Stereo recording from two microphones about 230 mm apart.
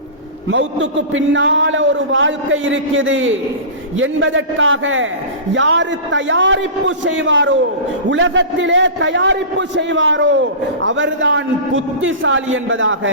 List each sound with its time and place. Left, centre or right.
0.5 s a man's voice: right